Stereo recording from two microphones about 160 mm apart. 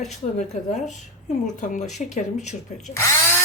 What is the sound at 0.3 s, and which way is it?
Speech, 45° left (ahead or behind).